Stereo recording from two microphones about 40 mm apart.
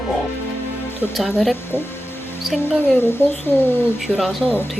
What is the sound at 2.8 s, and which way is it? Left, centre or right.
Speech, left.